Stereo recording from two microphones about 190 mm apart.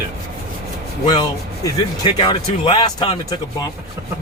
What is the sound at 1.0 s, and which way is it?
Speech, 20° left (ahead or behind).